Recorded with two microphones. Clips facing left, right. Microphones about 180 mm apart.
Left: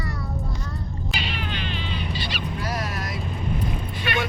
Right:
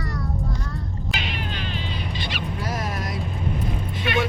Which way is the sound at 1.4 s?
40° right (ahead or behind).